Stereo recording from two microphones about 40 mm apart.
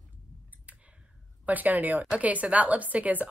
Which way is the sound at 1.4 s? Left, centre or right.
Right.